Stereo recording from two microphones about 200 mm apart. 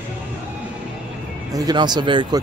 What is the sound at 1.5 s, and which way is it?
Speech, 20° right (ahead or behind).